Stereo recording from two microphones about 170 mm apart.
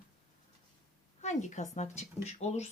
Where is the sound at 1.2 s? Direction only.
45° left (ahead or behind).